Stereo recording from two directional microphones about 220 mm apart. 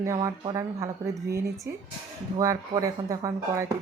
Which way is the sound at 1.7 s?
10° right (ahead or behind).